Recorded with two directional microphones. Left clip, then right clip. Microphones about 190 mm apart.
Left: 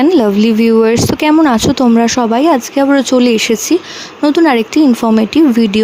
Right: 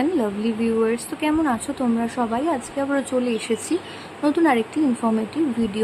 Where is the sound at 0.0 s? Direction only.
55° left (ahead or behind).